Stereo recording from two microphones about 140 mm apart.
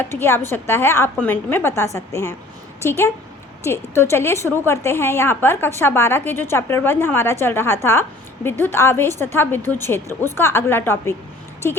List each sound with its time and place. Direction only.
0.0 s a woman's voice: 15° left (ahead or behind)
3.6 s a woman's voice: 20° left (ahead or behind)